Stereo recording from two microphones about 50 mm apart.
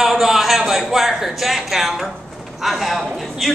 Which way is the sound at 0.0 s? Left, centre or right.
Centre.